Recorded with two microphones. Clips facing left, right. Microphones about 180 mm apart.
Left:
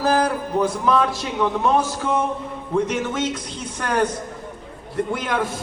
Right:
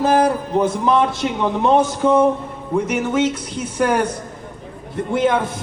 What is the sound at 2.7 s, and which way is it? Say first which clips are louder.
Speech: right 3 dB; 10° right (ahead or behind).